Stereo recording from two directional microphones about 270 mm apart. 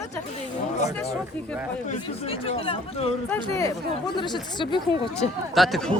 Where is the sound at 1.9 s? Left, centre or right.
Left.